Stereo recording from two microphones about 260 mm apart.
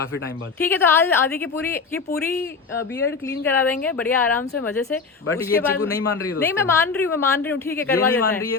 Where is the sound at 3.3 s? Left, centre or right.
Centre.